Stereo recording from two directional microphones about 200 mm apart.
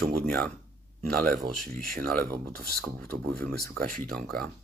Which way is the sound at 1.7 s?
50° right (ahead or behind).